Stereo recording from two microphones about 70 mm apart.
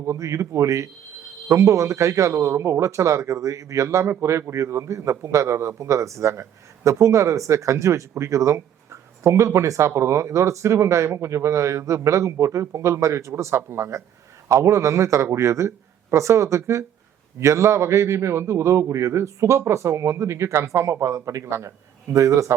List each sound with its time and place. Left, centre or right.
0.0 s a man's voice: right